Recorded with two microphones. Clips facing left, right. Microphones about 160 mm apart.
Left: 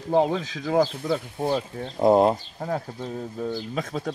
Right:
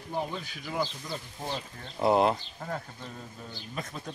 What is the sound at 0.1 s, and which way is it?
Speech, 90° left.